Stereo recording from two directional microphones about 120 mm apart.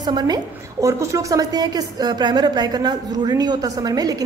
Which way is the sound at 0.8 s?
25° right (ahead or behind).